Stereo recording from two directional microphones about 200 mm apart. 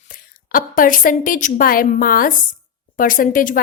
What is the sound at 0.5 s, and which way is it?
A woman's voice, 45° left (ahead or behind).